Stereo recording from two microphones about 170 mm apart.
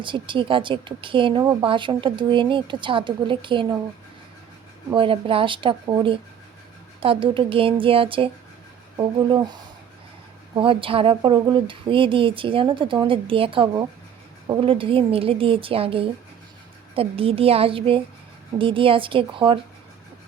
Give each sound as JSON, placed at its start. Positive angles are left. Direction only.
{"t": 0.0, "sound": "a woman's voice", "side_deg": -30}
{"t": 4.9, "sound": "speech", "side_deg": -30}
{"t": 10.5, "sound": "speech", "side_deg": -30}